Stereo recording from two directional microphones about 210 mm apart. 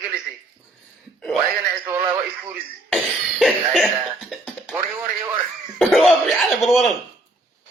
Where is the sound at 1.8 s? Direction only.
10° right (ahead or behind).